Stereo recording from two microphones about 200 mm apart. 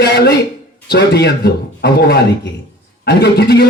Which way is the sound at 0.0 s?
55° left (ahead or behind).